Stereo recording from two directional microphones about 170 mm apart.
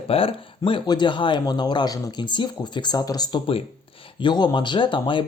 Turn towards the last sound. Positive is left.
turn(degrees=30)  # may be behind; listen again after turning